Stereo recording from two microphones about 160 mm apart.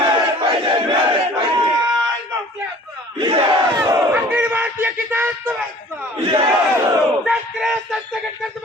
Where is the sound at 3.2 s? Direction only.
35° right (ahead or behind).